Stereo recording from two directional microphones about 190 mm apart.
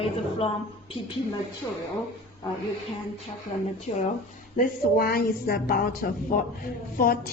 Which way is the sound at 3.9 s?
35° left (ahead or behind).